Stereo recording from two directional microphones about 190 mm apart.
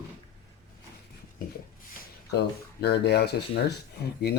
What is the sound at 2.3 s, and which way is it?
Speech, 60° left (ahead or behind).